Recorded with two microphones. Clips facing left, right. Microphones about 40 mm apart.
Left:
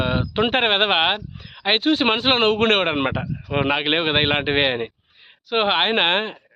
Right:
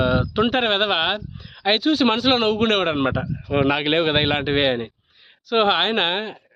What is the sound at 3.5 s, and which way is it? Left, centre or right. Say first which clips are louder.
A man's voice: right 1 dB; left.